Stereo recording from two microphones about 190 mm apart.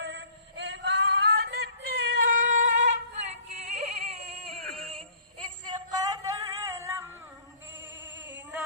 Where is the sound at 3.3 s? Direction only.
35° right (ahead or behind).